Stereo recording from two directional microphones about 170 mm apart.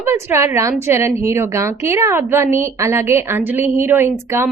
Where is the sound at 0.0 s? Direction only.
15° right (ahead or behind).